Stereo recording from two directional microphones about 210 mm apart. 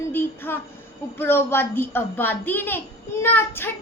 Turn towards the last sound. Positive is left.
turn(degrees=10)  # may be behind; listen again after turning